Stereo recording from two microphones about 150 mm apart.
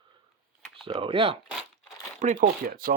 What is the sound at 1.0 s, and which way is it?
Speech, 40° right (ahead or behind).